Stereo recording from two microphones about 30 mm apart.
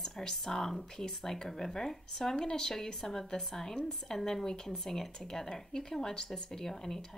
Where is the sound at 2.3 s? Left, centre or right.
Left.